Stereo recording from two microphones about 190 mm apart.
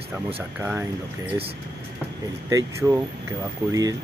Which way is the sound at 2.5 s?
15° right (ahead or behind).